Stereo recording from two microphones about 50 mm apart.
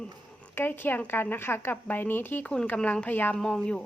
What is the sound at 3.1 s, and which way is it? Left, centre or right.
Speech, left.